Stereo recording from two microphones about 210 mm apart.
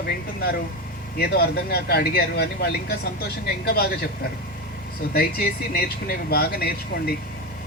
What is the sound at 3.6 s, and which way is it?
Speech, 50° left (ahead or behind).